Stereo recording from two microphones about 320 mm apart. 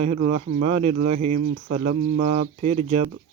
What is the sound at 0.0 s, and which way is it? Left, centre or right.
Speech, centre.